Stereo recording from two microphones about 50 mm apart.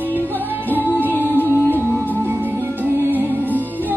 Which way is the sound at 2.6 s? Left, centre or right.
Right.